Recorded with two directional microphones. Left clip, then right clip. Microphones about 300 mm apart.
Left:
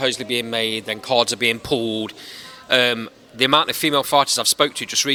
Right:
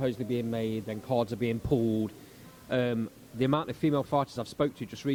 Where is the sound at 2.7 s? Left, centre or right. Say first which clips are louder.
Left 12 dB; centre.